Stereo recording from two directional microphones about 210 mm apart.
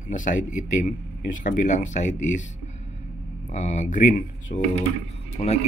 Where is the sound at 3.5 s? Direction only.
35° left (ahead or behind).